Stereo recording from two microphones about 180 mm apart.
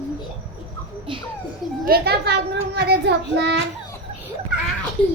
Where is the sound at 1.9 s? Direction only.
65° right (ahead or behind).